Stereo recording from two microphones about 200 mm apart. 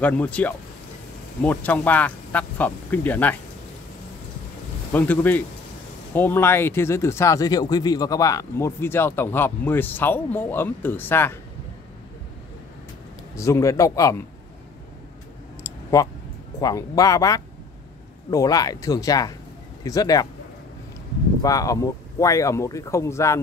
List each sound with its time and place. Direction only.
0.0 s speech: 5° left (ahead or behind)
4.9 s speech: 10° left (ahead or behind)
13.4 s speech: 15° left (ahead or behind)
15.6 s clicking: 15° left (ahead or behind)
16.5 s speech: 20° left (ahead or behind)
21.4 s speech: 15° left (ahead or behind)